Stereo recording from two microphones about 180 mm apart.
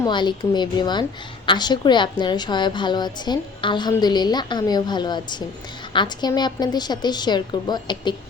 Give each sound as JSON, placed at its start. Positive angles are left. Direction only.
{"t": 0.0, "sound": "a woman's voice", "side_deg": 25}